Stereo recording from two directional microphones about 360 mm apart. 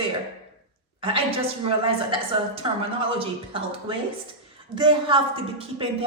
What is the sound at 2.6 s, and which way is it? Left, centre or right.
A woman's voice, centre.